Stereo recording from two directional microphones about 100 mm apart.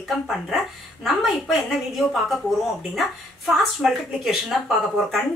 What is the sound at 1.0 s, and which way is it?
Speech, centre (ahead or behind).